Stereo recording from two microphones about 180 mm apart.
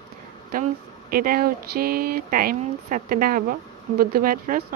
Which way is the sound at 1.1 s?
55° right (ahead or behind).